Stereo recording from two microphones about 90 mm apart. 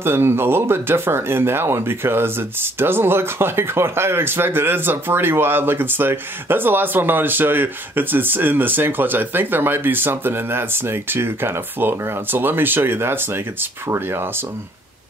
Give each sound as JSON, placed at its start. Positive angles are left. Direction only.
{"t": 0.0, "sound": "speech", "side_deg": -25}